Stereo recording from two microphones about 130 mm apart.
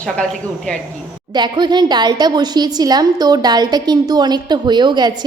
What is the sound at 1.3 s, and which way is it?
A woman's voice, 35° right (ahead or behind).